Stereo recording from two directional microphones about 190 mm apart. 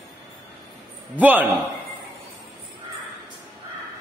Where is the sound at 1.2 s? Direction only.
10° right (ahead or behind).